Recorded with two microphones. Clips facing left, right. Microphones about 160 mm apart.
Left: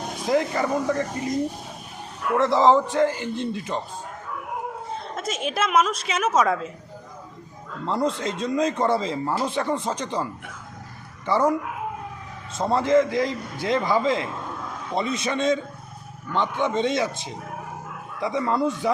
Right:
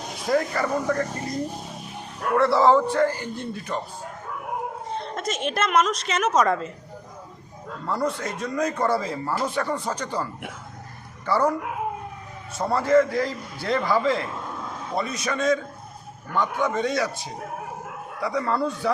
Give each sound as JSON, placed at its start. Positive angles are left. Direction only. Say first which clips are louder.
{"t": 0.3, "sound": "a man's voice", "louder": "left 1 dB", "side_deg": 20}
{"t": 2.3, "sound": "a man's voice", "louder": "even", "side_deg": 20}
{"t": 4.9, "sound": "a woman's voice", "louder": "right 3 dB", "side_deg": 5}
{"t": 7.9, "sound": "a man's voice", "louder": "left 2 dB", "side_deg": 25}
{"t": 11.3, "sound": "a man's voice", "louder": "left 1 dB", "side_deg": 20}
{"t": 12.5, "sound": "a man's voice", "louder": "even", "side_deg": 20}